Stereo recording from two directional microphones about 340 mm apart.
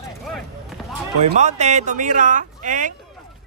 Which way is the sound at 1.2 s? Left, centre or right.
Centre.